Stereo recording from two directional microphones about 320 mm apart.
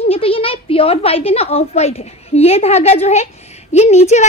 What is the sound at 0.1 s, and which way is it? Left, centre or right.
A woman's voice, centre.